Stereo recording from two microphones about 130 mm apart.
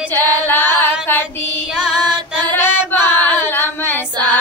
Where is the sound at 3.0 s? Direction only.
15° left (ahead or behind).